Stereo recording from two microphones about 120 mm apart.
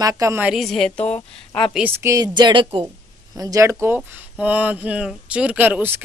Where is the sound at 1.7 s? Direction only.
15° right (ahead or behind); by 2.8 s 45° right (ahead or behind).